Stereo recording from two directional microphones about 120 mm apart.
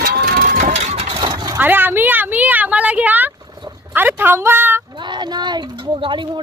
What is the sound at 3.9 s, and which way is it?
Speech, 15° right (ahead or behind).